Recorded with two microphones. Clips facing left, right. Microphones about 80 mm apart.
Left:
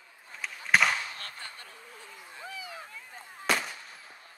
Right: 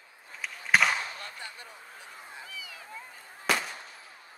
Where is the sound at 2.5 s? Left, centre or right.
Left.